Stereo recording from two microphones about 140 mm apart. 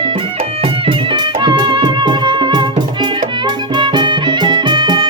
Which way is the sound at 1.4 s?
35° right (ahead or behind).